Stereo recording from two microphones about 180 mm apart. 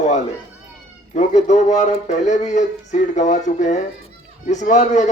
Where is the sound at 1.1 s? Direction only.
40° left (ahead or behind).